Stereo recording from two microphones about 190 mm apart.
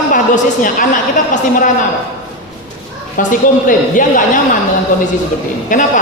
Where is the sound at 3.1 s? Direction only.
45° left (ahead or behind).